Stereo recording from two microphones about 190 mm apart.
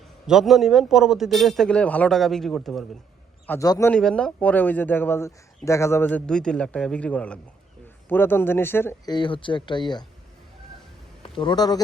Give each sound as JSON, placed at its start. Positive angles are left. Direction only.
{"t": 0.3, "sound": "a man's voice", "side_deg": 0}
{"t": 3.4, "sound": "speech", "side_deg": 15}
{"t": 9.1, "sound": "speech", "side_deg": 25}
{"t": 11.2, "sound": "a man's voice", "side_deg": 25}